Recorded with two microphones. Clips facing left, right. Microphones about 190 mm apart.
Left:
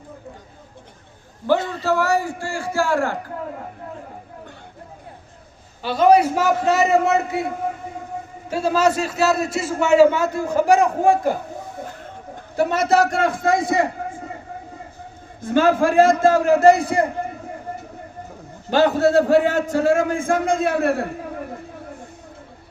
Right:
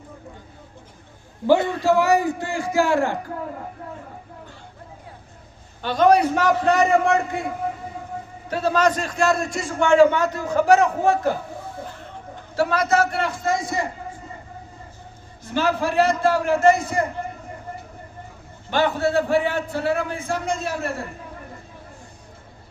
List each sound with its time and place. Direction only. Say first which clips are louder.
1.8 s a man's voice: right 2 dB; 15° right (ahead or behind)
5.8 s a man's voice: left 2 dB; 5° left (ahead or behind)
8.4 s a man's voice: left 1 dB; 10° left (ahead or behind)
12.5 s a man's voice: left 2 dB; 25° left (ahead or behind)
13.0 s a man's voice: left 4 dB; 45° left (ahead or behind)
15.4 s a man's voice: left 6 dB; 50° left (ahead or behind); by 17.1 s 35° left (ahead or behind)
18.7 s a man's voice: left 5 dB; 40° left (ahead or behind); by 21.4 s 60° left (ahead or behind)